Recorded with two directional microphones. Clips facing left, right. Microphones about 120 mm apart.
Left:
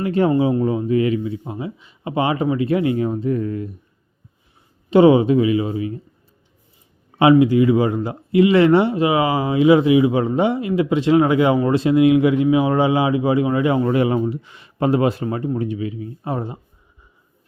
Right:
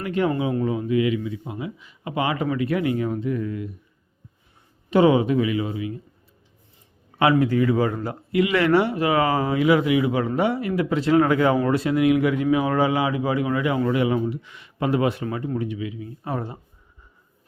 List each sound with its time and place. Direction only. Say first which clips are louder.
0.0 s speech: left 6 dB; 35° left (ahead or behind)
4.9 s speech: left 5 dB; 25° left (ahead or behind)
7.2 s speech: left 6 dB; 20° left (ahead or behind)